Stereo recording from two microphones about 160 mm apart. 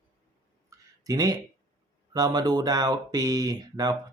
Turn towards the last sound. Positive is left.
turn(degrees=-25)  # may be behind; listen again after turning